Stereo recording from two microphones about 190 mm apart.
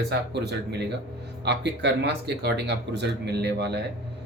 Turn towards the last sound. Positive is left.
turn(degrees=-60)  # may be behind; listen again after turning